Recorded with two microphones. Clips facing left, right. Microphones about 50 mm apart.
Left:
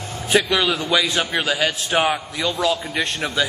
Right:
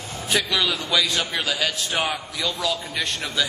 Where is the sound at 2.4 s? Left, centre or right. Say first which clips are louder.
Left 5 dB; centre.